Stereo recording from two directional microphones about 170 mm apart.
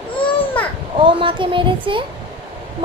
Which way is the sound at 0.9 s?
30° right (ahead or behind).